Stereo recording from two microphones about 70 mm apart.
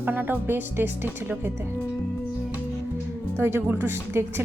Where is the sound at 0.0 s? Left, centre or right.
Right.